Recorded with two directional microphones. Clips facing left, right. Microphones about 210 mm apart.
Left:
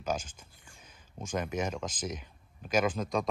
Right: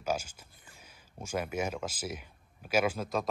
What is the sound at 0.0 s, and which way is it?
Speech, 10° right (ahead or behind).